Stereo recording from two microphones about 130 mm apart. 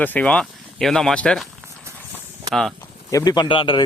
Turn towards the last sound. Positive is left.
turn(degrees=40)  # may be behind; listen again after turning